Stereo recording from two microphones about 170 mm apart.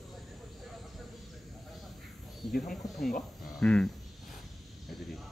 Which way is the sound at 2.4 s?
Centre (ahead or behind).